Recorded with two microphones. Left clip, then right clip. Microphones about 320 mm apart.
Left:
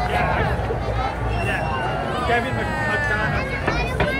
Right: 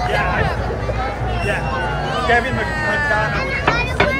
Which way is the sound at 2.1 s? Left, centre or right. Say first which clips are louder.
Right 7 dB; right.